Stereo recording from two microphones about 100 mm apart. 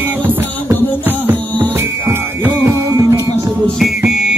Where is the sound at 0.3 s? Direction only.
20° right (ahead or behind).